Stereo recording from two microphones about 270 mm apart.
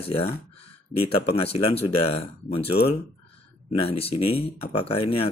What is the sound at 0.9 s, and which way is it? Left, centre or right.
Speech, left.